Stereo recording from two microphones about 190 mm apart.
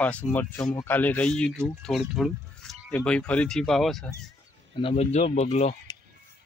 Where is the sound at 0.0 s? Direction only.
10° left (ahead or behind).